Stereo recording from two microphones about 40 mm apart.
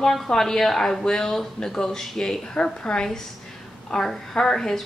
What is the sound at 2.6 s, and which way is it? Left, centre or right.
Speech, left.